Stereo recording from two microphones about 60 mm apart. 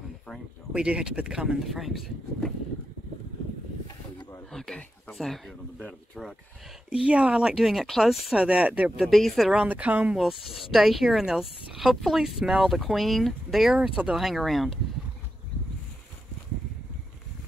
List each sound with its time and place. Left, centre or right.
0.7 s speech: centre
4.5 s a sound: centre
5.1 s speech: centre
6.9 s speech: centre
8.4 s speech: centre
9.1 s speech: centre
9.7 s speech: right
10.1 s speech: centre
13.7 s speech: centre
14.1 s speech: centre